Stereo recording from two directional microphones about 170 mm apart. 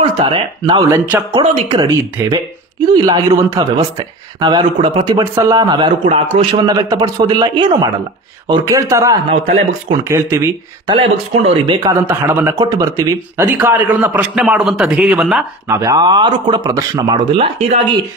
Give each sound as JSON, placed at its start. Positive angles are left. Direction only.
{"t": 0.2, "sound": "a man's voice", "side_deg": -30}
{"t": 0.8, "sound": "speech", "side_deg": -15}
{"t": 1.3, "sound": "a man's voice", "side_deg": -25}
{"t": 2.9, "sound": "a man's voice", "side_deg": -25}
{"t": 5.2, "sound": "a man's voice", "side_deg": -20}
{"t": 9.3, "sound": "speech", "side_deg": -35}
{"t": 10.0, "sound": "speech", "side_deg": -15}
{"t": 10.9, "sound": "speech", "side_deg": -30}
{"t": 11.9, "sound": "speech", "side_deg": -15}
{"t": 15.7, "sound": "a man's voice", "side_deg": -20}